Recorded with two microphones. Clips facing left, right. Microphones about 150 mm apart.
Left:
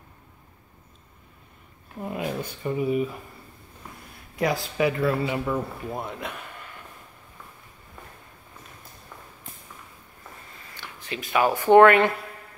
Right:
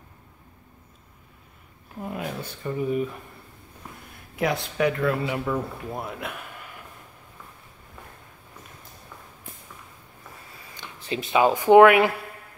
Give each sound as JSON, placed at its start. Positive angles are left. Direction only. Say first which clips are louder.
{"t": 2.0, "sound": "speech", "louder": "left 2 dB", "side_deg": 0}
{"t": 4.4, "sound": "speech", "louder": "even", "side_deg": 0}
{"t": 10.6, "sound": "a sound", "louder": "right 1 dB", "side_deg": -15}
{"t": 11.0, "sound": "speech", "louder": "right 2 dB", "side_deg": -30}